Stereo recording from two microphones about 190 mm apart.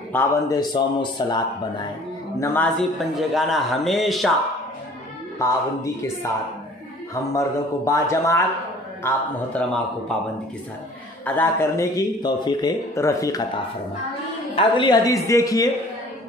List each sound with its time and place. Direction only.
0.1 s speech: 10° left (ahead or behind)
1.2 s a man's voice: 20° left (ahead or behind)
2.4 s a man's voice: 10° left (ahead or behind)
5.4 s speech: 15° left (ahead or behind)
7.3 s speech: 15° left (ahead or behind)
11.2 s speech: 10° left (ahead or behind)
14.5 s a man's voice: 25° left (ahead or behind)